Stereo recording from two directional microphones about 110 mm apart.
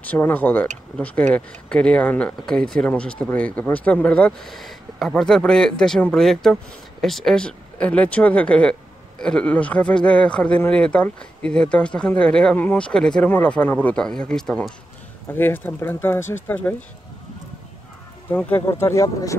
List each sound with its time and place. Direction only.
0.0 s speech: 15° left (ahead or behind)
15.3 s speech: 20° left (ahead or behind)
18.3 s speech: 15° left (ahead or behind)